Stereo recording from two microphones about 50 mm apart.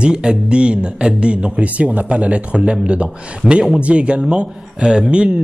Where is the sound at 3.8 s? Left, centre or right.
Right.